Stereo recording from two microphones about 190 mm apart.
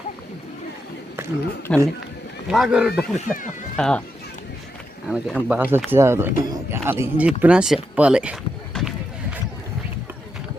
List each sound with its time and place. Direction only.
1.7 s speech: 5° left (ahead or behind)
5.0 s a man's voice: 5° right (ahead or behind)